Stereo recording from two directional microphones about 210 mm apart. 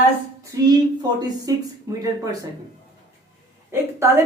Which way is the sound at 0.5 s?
15° right (ahead or behind).